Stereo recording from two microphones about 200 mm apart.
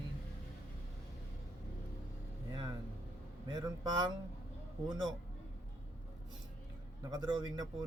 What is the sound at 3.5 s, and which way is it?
Speech, 20° right (ahead or behind).